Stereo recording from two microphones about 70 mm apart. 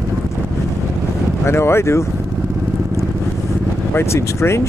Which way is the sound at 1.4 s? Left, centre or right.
Left.